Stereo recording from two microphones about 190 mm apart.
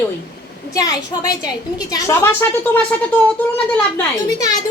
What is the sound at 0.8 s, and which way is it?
A child's voice, 20° left (ahead or behind).